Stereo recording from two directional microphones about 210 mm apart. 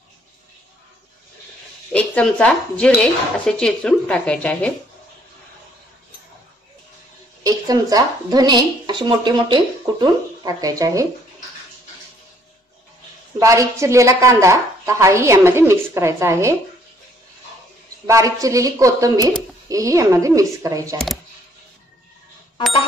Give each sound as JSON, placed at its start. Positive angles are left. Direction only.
{"t": 1.9, "sound": "speech", "side_deg": 5}
{"t": 7.4, "sound": "speech", "side_deg": -15}
{"t": 13.4, "sound": "speech", "side_deg": -15}
{"t": 18.0, "sound": "speech", "side_deg": -15}